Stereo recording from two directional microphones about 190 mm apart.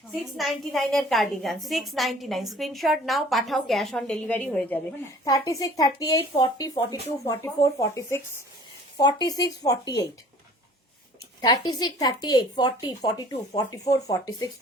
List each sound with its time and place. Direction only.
0.3 s a woman's voice: centre (ahead or behind); by 10.1 s 20° left (ahead or behind)
11.3 s a woman's voice: 20° left (ahead or behind)